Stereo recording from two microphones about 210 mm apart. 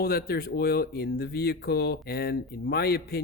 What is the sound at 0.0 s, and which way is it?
Speech, 45° left (ahead or behind).